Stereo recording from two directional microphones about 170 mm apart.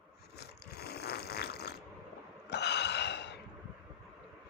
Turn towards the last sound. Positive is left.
turn(degrees=90)